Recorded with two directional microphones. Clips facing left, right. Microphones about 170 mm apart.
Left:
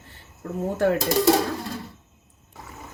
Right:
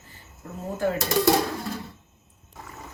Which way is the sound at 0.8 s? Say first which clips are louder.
Left 4 dB; 70° left (ahead or behind).